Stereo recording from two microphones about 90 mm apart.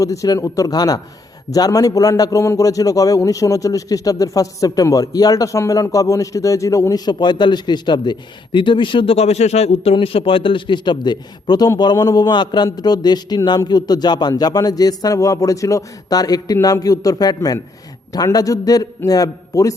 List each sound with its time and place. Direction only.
0.0 s a man's voice: 40° left (ahead or behind); by 9.1 s 70° left (ahead or behind)
9.8 s a man's voice: 90° left; by 19.7 s 40° left (ahead or behind)